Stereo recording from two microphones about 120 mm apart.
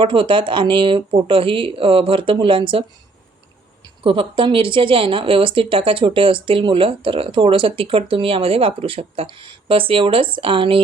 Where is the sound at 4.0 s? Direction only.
45° right (ahead or behind).